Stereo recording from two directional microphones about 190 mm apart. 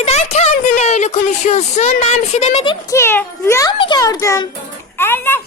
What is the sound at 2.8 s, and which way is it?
A child's voice, 15° left (ahead or behind).